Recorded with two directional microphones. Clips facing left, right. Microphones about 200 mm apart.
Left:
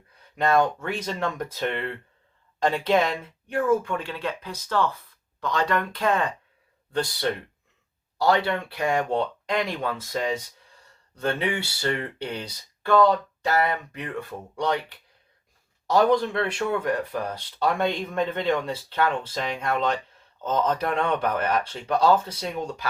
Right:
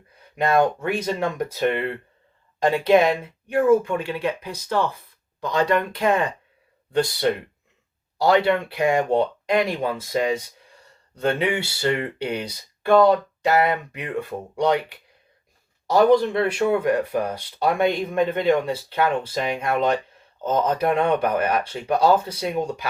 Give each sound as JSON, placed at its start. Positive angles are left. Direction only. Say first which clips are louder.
{"t": 0.3, "sound": "speech", "louder": "right 2 dB", "side_deg": -10}
{"t": 15.9, "sound": "speech", "louder": "right 4 dB", "side_deg": -5}